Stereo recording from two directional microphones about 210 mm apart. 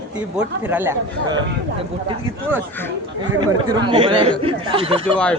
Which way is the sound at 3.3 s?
20° right (ahead or behind).